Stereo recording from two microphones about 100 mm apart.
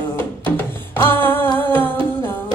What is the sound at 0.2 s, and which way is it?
Music, 20° left (ahead or behind).